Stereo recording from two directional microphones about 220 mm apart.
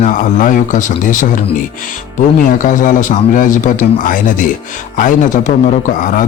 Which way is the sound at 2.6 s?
35° left (ahead or behind).